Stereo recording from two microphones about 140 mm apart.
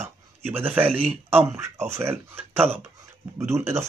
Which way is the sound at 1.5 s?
15° right (ahead or behind).